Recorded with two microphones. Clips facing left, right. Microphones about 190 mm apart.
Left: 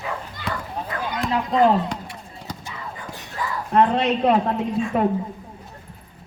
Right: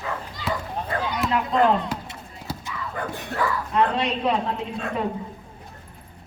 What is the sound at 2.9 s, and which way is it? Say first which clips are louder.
Whispering: right 6 dB; 60° right (ahead or behind).